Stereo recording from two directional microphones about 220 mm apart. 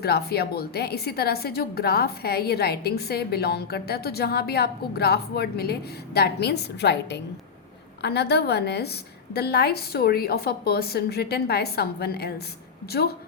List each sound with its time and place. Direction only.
0.0 s a woman's voice: 45° left (ahead or behind)